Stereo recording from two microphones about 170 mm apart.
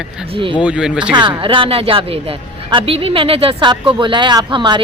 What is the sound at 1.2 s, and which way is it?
A woman's voice, 30° right (ahead or behind).